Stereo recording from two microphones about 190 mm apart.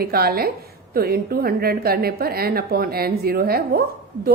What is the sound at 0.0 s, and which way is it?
A woman's voice, 55° right (ahead or behind).